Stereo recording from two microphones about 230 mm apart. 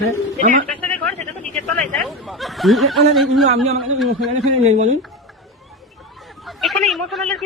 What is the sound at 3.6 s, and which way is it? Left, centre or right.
Speech, centre.